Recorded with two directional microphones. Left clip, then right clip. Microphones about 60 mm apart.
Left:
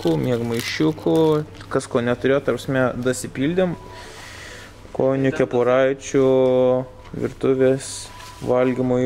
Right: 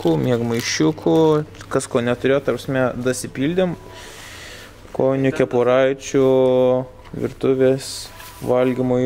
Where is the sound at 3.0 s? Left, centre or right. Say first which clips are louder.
Right 1 dB; right.